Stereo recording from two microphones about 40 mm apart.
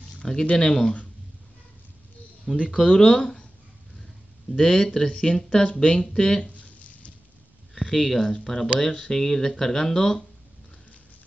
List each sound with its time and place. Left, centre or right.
0.5 s speech: centre
2.5 s speech: centre
2.8 s speech: centre
4.6 s speech: centre
7.7 s a sound: centre
8.2 s speech: centre